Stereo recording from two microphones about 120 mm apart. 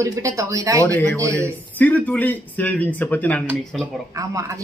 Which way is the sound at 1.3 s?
15° left (ahead or behind).